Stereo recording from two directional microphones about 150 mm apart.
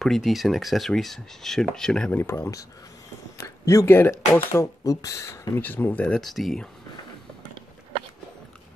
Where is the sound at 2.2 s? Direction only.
15° left (ahead or behind); by 6.7 s centre (ahead or behind).